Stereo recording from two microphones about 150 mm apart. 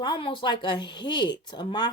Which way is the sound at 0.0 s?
35° left (ahead or behind).